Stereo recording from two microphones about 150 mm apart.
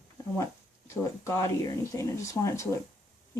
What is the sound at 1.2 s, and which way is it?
Speech, 20° left (ahead or behind).